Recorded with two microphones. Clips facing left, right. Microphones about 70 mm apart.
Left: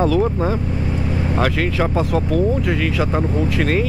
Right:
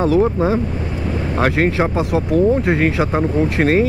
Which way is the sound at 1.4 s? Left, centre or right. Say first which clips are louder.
Right 4 dB; right.